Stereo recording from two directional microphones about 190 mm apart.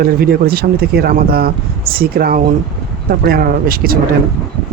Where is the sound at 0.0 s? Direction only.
55° right (ahead or behind).